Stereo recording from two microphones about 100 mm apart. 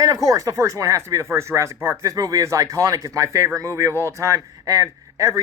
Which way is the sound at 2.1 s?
35° right (ahead or behind).